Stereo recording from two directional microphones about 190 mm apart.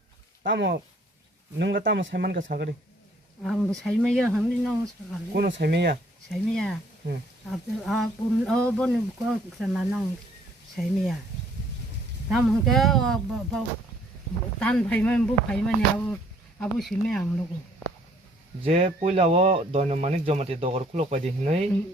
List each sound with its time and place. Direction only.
0.4 s speech: 70° right (ahead or behind)
3.4 s speech: centre (ahead or behind)
5.3 s speech: 60° right (ahead or behind)
6.3 s speech: 5° left (ahead or behind)
12.3 s speech: centre (ahead or behind)
14.6 s speech: 5° left (ahead or behind)
18.6 s speech: 35° right (ahead or behind)